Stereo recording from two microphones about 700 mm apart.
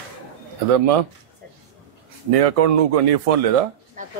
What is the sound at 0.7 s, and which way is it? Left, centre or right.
Speech, right.